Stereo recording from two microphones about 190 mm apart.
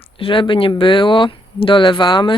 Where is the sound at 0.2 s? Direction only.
25° left (ahead or behind).